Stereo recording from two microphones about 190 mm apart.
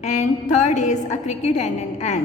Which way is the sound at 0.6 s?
40° left (ahead or behind).